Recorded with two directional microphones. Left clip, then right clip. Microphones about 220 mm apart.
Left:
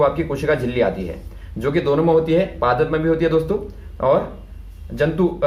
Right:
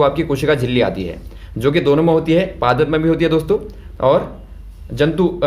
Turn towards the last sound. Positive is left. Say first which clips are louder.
# right 3 dB
turn(degrees=-45)  # may be behind; listen again after turning